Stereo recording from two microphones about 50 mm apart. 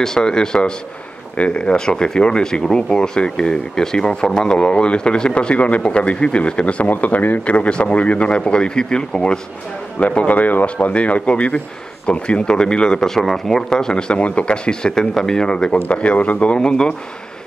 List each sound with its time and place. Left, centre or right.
0.0 s speech: centre
9.9 s speech: left